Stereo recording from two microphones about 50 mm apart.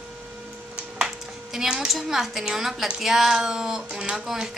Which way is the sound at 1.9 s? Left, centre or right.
Centre.